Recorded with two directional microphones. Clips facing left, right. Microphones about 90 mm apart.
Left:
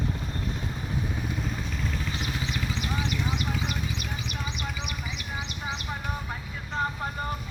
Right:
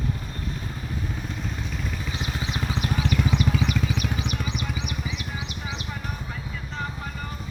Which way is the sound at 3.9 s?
65° right (ahead or behind).